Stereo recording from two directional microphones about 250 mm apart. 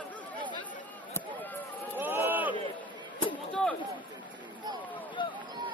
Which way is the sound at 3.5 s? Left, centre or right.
Centre.